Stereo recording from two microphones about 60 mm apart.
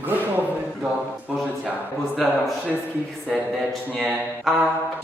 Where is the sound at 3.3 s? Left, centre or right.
Centre.